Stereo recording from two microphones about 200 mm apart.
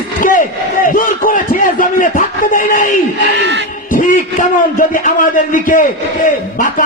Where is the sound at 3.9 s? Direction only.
40° left (ahead or behind).